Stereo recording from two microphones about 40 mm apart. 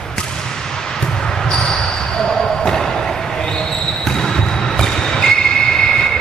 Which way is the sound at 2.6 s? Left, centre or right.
Centre.